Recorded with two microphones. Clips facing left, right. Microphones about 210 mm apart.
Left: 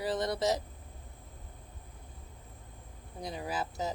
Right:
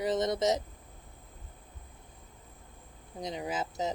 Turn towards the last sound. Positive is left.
turn(degrees=-20)  # may be behind; listen again after turning